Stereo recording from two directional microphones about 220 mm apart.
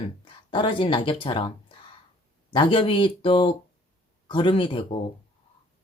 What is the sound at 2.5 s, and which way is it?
Speech, 20° left (ahead or behind).